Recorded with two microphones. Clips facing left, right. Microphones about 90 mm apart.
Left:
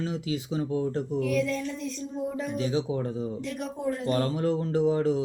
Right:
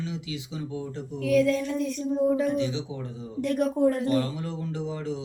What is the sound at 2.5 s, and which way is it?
Speech, 40° left (ahead or behind).